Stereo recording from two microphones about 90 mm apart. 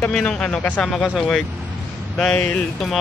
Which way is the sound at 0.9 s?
Centre (ahead or behind).